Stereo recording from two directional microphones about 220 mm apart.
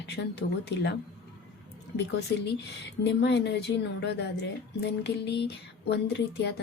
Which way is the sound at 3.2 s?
50° left (ahead or behind).